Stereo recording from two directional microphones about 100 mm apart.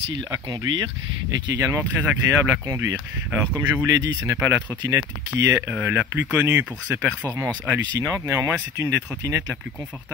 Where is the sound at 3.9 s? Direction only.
35° right (ahead or behind).